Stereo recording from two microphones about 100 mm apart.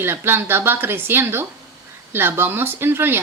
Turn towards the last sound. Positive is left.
turn(degrees=-20)  # may be behind; listen again after turning